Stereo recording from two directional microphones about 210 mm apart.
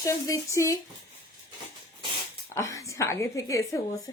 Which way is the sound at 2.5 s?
15° left (ahead or behind).